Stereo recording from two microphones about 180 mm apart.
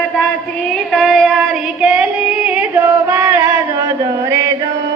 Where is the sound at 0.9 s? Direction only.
Centre (ahead or behind).